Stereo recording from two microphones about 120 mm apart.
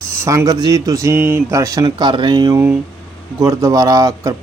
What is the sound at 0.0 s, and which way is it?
Speech, 25° right (ahead or behind).